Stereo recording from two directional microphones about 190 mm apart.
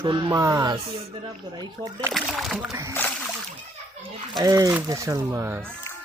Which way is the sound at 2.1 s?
Centre (ahead or behind).